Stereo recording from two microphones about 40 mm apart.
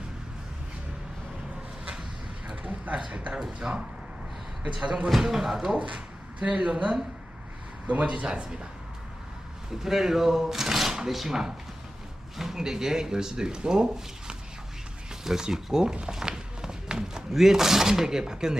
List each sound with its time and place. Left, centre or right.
3.1 s a woman's voice: right
4.7 s speech: right
5.2 s speech: centre
6.4 s a woman's voice: right
9.8 s speech: centre